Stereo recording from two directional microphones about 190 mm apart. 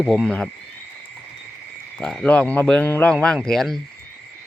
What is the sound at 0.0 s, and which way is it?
Speech, centre (ahead or behind).